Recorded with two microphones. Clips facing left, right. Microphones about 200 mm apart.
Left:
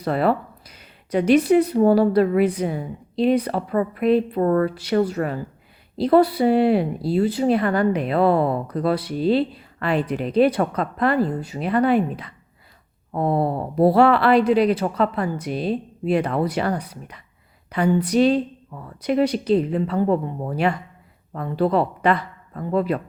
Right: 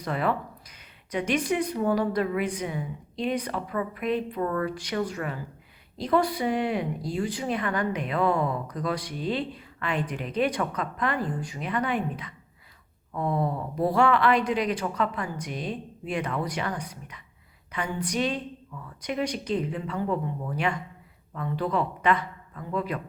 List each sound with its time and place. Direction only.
0.0 s a sound: 35° left (ahead or behind)
1.3 s a woman's voice: 30° left (ahead or behind)
17.7 s a woman's voice: 35° left (ahead or behind)